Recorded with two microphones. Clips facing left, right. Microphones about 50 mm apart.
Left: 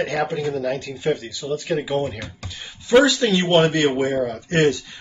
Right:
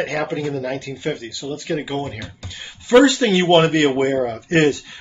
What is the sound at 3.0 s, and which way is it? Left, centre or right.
Speech, centre.